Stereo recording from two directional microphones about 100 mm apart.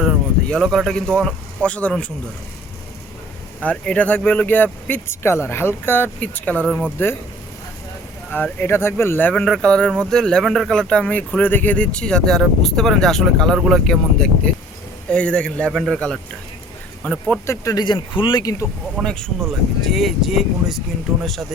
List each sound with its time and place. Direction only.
0.5 s speech: 5° left (ahead or behind)
3.6 s speech: 10° left (ahead or behind)
8.3 s speech: 15° left (ahead or behind)
9.3 s speech: 5° left (ahead or behind)
17.4 s speech: 30° left (ahead or behind)
17.8 s speech: 55° left (ahead or behind)
18.9 s speech: 5° left (ahead or behind)